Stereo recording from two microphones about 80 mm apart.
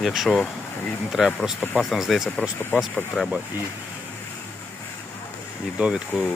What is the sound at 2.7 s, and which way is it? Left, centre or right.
Speech, left.